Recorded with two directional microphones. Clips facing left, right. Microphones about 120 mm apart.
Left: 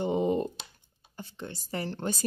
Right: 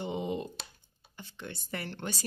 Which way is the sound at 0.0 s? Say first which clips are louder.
Left 7 dB; 45° left (ahead or behind).